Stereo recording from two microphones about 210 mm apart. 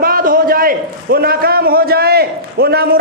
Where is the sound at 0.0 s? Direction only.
45° right (ahead or behind).